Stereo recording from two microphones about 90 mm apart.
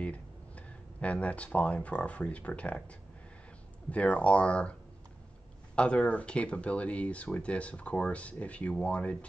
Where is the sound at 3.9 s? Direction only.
15° left (ahead or behind).